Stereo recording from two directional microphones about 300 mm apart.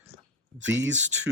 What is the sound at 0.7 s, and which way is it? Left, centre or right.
Speech, right.